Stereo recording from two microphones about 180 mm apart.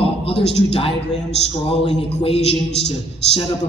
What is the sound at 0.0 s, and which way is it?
A man's voice, 35° left (ahead or behind).